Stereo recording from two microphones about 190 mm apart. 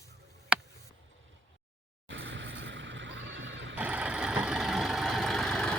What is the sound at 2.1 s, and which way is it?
Horse, 70° right (ahead or behind).